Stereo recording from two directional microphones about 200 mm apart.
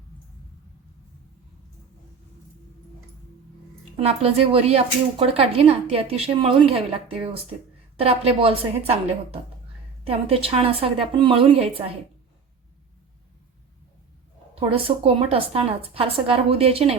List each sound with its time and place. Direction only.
3.9 s a woman's voice: 30° right (ahead or behind)
7.9 s a woman's voice: 30° right (ahead or behind)
14.5 s a woman's voice: 30° right (ahead or behind)